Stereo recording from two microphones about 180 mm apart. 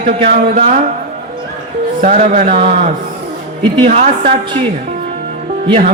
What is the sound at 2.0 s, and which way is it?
A woman's voice, 40° right (ahead or behind).